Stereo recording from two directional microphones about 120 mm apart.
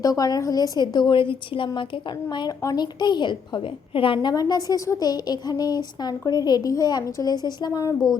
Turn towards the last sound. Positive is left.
turn(degrees=30)  # may be behind; listen again after turning